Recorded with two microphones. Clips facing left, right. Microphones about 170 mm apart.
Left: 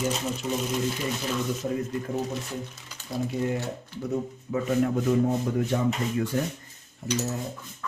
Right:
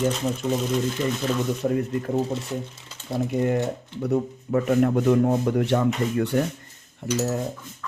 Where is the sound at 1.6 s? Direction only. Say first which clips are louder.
Right 8 dB; 50° right (ahead or behind).